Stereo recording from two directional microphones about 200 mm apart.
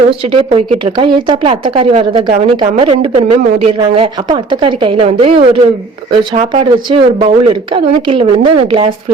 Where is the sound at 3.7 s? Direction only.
25° right (ahead or behind).